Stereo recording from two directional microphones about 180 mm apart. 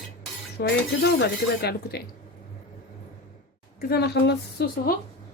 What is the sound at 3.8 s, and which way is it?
A woman's voice, 60° left (ahead or behind).